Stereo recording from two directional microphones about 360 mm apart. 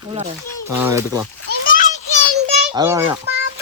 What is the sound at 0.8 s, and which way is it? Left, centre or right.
Speech, centre.